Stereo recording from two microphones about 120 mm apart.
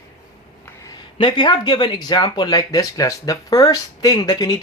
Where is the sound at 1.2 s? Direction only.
40° left (ahead or behind).